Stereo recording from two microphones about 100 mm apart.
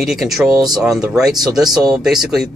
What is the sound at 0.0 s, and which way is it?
Speech, centre (ahead or behind).